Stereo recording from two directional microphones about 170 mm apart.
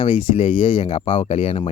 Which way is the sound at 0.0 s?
30° left (ahead or behind).